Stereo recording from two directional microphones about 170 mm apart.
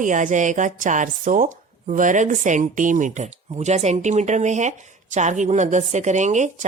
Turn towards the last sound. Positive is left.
turn(degrees=-45)  # may be behind; listen again after turning